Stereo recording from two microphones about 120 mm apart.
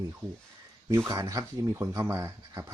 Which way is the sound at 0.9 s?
25° right (ahead or behind).